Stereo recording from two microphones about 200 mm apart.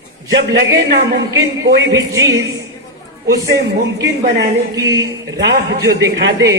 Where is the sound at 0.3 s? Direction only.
60° right (ahead or behind).